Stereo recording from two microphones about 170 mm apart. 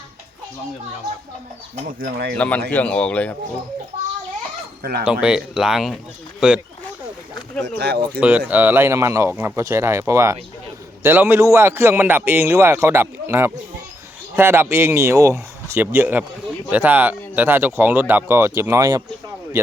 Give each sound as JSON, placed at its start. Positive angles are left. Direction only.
{"t": 1.7, "sound": "speech", "side_deg": -60}
{"t": 2.4, "sound": "a man's voice", "side_deg": 10}
{"t": 4.8, "sound": "speech", "side_deg": -65}
{"t": 5.2, "sound": "speech", "side_deg": -5}
{"t": 7.6, "sound": "speech", "side_deg": -75}
{"t": 8.2, "sound": "a man's voice", "side_deg": -10}